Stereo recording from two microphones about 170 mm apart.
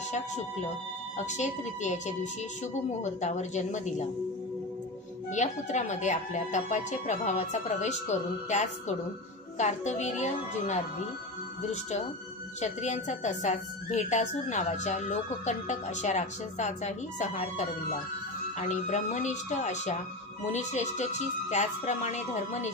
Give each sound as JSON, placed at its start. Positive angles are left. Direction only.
{"t": 1.1, "sound": "a woman's voice", "side_deg": 45}
{"t": 5.3, "sound": "a woman's voice", "side_deg": 45}
{"t": 12.5, "sound": "a woman's voice", "side_deg": 40}